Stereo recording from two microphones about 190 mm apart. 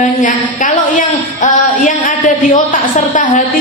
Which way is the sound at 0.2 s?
45° left (ahead or behind).